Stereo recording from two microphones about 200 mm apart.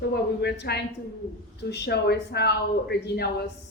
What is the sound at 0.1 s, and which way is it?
A woman's voice, 55° left (ahead or behind).